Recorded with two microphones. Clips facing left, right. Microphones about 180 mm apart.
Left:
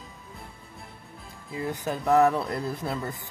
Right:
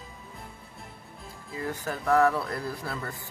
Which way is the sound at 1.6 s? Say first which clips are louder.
Left 3 dB; 20° left (ahead or behind).